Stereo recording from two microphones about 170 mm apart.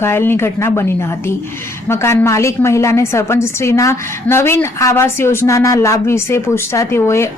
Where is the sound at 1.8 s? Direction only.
15° left (ahead or behind).